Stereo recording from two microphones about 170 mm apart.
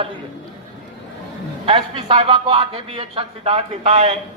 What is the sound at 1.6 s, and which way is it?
A man's voice, 35° right (ahead or behind).